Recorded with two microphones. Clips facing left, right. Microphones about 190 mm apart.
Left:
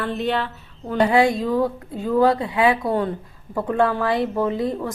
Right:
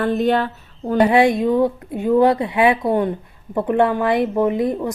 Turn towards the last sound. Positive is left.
turn(degrees=-20)  # may be behind; listen again after turning